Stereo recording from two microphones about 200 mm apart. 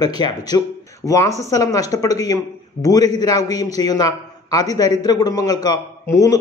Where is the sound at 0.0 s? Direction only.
20° left (ahead or behind).